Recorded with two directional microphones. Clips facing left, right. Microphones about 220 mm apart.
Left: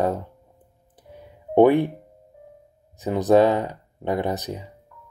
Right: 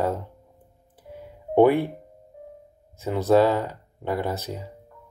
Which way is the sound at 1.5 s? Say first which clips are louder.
Left 2 dB; 15° left (ahead or behind).